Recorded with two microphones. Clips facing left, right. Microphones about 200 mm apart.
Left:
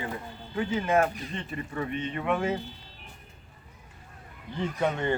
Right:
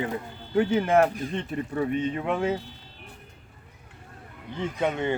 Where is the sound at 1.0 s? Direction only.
45° right (ahead or behind).